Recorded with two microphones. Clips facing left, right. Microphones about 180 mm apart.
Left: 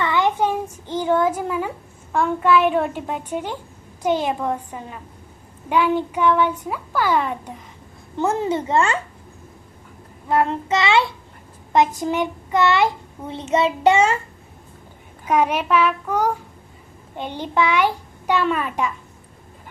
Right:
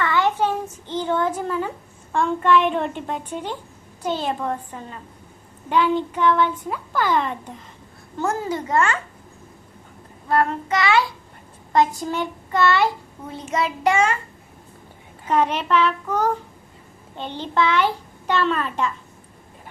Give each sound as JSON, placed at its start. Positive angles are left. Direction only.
{"t": 0.0, "sound": "child singing", "side_deg": 15}
{"t": 2.1, "sound": "a child's voice", "side_deg": 5}
{"t": 8.2, "sound": "a child's voice", "side_deg": 25}
{"t": 10.2, "sound": "a child's voice", "side_deg": 20}
{"t": 15.3, "sound": "a child's voice", "side_deg": 10}